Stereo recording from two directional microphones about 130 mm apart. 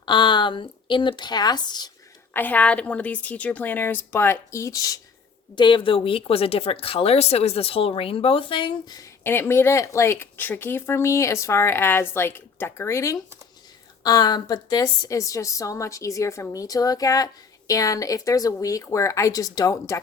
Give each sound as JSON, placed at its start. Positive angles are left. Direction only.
{"t": 0.0, "sound": "speech", "side_deg": 35}
{"t": 2.3, "sound": "a woman's voice", "side_deg": 15}
{"t": 5.5, "sound": "speech", "side_deg": 40}
{"t": 9.2, "sound": "speech", "side_deg": 20}